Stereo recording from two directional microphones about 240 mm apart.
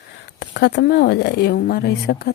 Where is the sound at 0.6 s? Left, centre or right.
Left.